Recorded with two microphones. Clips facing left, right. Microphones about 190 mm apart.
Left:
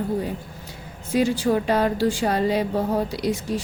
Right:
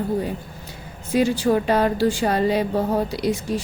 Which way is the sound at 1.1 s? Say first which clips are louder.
Right 2 dB; 65° right (ahead or behind).